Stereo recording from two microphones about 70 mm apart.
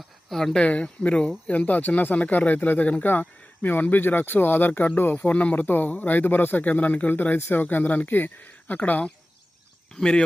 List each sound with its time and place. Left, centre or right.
0.3 s speech: centre
0.6 s speech: centre
9.9 s speech: centre